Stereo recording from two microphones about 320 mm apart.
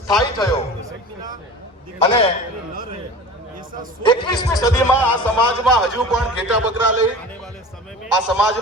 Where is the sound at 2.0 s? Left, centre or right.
Centre.